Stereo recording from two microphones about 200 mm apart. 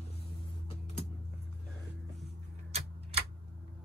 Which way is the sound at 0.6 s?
30° left (ahead or behind).